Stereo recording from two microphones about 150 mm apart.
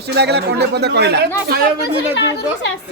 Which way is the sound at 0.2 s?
90° right.